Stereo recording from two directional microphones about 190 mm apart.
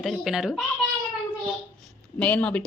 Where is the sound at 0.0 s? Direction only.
Centre (ahead or behind).